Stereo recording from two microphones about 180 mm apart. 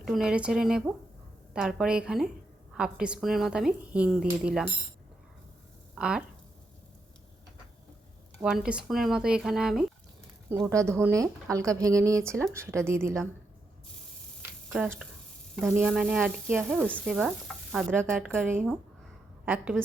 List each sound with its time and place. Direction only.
0.0 s speech: centre (ahead or behind)
5.9 s speech: 5° right (ahead or behind)
8.4 s speech: 5° right (ahead or behind)
10.7 s speech: 15° right (ahead or behind)
14.7 s speech: 5° right (ahead or behind)
19.7 s speech: 5° left (ahead or behind)